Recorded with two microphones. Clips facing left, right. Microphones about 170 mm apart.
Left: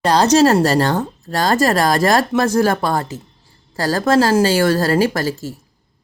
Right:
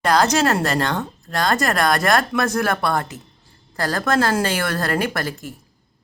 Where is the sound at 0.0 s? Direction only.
30° left (ahead or behind).